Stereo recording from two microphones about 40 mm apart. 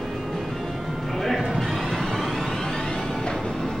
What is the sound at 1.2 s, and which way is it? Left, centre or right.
Music, centre.